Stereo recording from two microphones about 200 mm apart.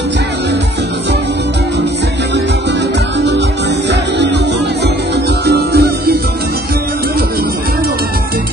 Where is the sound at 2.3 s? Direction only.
60° right (ahead or behind).